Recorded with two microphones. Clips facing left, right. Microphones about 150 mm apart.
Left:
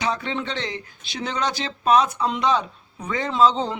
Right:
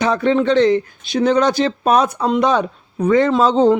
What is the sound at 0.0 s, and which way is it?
Speech, 50° right (ahead or behind).